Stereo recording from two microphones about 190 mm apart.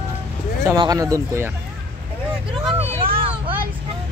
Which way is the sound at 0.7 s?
20° right (ahead or behind).